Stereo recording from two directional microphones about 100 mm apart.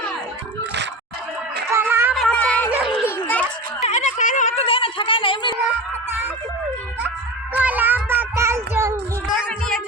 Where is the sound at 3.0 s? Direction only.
20° left (ahead or behind).